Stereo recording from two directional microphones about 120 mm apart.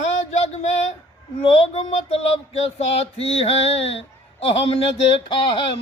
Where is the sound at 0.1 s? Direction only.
65° left (ahead or behind).